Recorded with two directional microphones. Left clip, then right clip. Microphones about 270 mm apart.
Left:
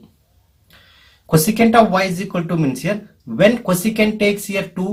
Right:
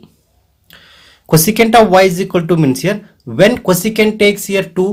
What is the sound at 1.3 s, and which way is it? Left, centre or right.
Speech, right.